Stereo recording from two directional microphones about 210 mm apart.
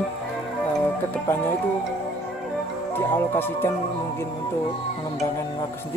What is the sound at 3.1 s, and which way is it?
Speech, 10° left (ahead or behind).